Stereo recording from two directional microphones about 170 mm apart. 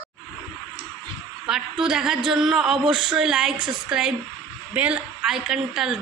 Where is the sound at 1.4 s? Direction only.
5° right (ahead or behind).